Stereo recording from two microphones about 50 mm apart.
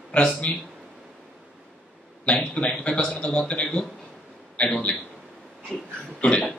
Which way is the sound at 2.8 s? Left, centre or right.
Left.